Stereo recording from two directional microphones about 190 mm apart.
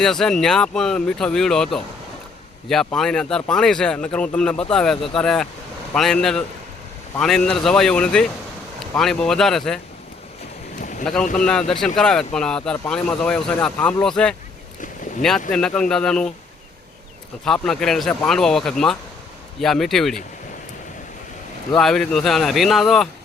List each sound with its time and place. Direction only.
0.0 s speech: 5° left (ahead or behind)
10.8 s boat: 40° left (ahead or behind)
11.0 s speech: 5° left (ahead or behind)
17.4 s speech: 5° left (ahead or behind)
21.8 s speech: centre (ahead or behind)